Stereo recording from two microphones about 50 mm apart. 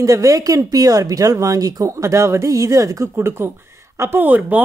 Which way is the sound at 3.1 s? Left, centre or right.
Right.